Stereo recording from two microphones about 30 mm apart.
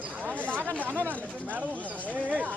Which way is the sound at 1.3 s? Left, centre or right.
Right.